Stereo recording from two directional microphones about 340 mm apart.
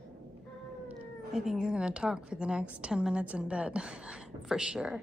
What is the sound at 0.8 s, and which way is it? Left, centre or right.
Speech, centre.